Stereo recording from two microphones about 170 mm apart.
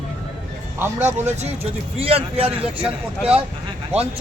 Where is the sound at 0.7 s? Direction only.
10° right (ahead or behind).